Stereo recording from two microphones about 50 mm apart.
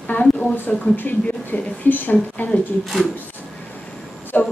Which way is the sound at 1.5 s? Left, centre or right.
Left.